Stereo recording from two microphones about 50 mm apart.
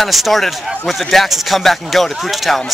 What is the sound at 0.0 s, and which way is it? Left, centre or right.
A man's voice, centre.